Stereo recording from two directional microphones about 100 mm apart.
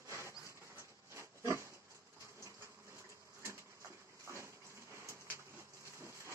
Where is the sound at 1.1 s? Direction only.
30° right (ahead or behind).